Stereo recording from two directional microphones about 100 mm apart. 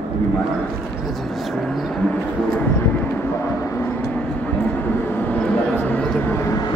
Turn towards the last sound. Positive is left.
turn(degrees=30)  # may be behind; listen again after turning